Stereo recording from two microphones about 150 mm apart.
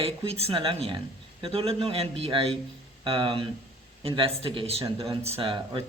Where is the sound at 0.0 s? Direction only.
40° right (ahead or behind).